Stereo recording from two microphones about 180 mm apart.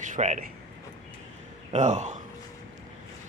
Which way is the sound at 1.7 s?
40° right (ahead or behind).